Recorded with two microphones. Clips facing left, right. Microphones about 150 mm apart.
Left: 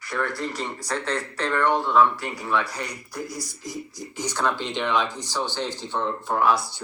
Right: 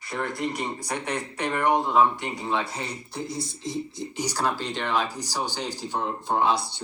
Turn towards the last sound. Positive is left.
turn(degrees=-25)  # may be behind; listen again after turning